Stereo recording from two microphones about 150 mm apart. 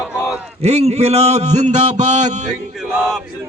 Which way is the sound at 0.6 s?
45° right (ahead or behind).